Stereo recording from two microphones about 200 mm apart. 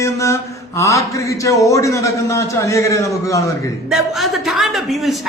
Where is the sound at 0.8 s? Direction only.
15° left (ahead or behind).